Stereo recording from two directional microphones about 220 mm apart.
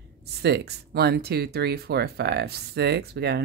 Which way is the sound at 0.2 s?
50° right (ahead or behind).